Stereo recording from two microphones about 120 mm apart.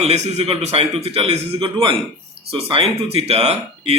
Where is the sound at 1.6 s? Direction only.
40° right (ahead or behind).